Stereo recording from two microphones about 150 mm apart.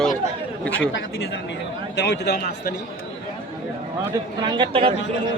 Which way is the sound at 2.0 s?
90° left.